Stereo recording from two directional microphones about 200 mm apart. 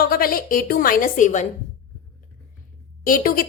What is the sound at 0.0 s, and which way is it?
A woman's voice, 50° left (ahead or behind).